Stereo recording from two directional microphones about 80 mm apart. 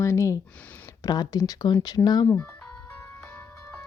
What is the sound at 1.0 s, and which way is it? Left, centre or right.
Speech, left.